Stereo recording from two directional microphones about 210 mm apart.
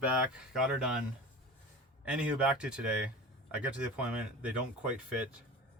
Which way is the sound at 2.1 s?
5° right (ahead or behind).